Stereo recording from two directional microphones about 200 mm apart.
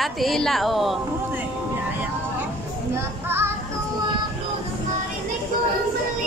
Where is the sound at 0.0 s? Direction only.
Centre (ahead or behind).